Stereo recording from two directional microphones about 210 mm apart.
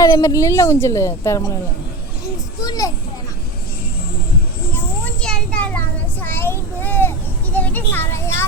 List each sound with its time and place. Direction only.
0.0 s speech: 15° left (ahead or behind)
2.6 s children playing: 15° left (ahead or behind)
5.0 s children playing: 5° left (ahead or behind)
6.2 s child singing: 10° left (ahead or behind)
7.5 s music: 10° left (ahead or behind)